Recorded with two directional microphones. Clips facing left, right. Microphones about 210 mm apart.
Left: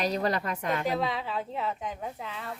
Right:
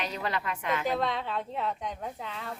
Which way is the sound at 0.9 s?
Centre (ahead or behind).